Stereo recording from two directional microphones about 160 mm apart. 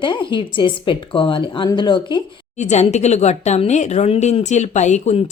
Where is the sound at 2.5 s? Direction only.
45° left (ahead or behind).